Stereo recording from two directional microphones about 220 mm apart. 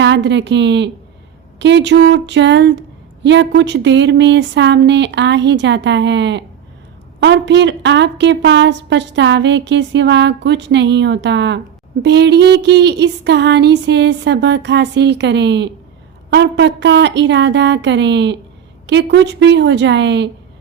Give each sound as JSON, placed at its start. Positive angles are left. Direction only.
{"t": 0.0, "sound": "a woman's voice", "side_deg": -55}